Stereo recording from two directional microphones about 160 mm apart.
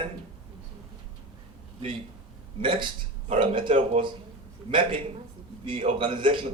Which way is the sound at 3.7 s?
50° right (ahead or behind).